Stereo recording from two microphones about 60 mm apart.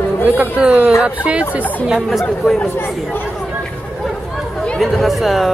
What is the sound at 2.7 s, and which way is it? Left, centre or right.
Speech, left.